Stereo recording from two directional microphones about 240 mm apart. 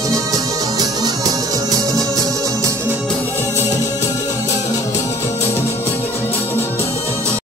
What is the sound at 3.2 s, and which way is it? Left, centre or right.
Music, centre.